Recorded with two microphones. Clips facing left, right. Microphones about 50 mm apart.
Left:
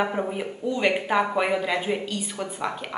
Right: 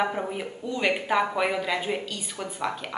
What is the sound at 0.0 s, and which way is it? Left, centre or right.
A woman's voice, centre.